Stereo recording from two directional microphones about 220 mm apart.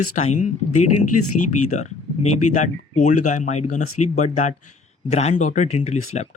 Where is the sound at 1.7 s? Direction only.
30° left (ahead or behind).